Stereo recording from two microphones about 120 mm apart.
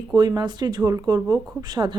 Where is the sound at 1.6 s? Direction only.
35° right (ahead or behind).